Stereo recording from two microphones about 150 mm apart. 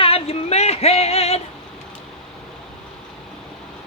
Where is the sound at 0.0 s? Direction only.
40° left (ahead or behind).